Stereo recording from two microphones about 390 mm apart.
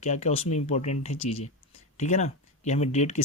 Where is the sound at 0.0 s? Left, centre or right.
Centre.